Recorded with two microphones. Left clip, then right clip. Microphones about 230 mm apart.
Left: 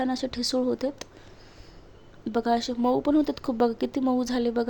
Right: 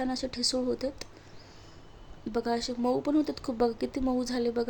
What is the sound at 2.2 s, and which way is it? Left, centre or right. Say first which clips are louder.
A woman's voice: left 5 dB; centre.